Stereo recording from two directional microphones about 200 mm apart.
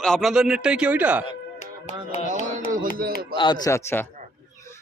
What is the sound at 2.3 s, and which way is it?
Music, 40° right (ahead or behind).